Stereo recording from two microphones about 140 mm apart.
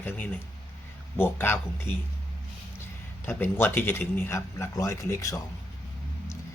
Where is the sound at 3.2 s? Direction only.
15° left (ahead or behind).